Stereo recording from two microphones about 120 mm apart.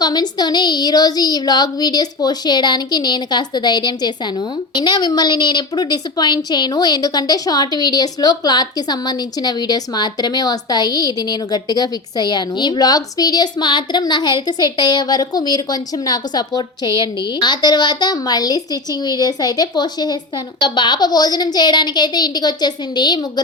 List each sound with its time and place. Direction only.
0.0 s a woman's voice: 35° left (ahead or behind)